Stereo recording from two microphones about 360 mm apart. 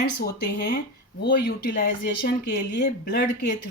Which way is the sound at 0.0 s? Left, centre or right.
Left.